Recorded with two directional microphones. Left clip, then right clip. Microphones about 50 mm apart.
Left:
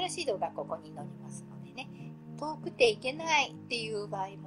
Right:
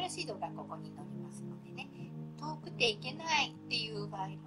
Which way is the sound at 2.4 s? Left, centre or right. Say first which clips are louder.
Left 7 dB; left.